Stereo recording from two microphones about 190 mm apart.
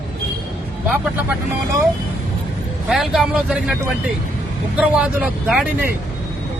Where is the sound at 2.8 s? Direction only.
Centre (ahead or behind).